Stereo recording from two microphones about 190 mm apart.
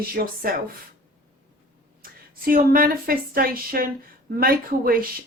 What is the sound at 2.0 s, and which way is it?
A woman's voice, 50° right (ahead or behind).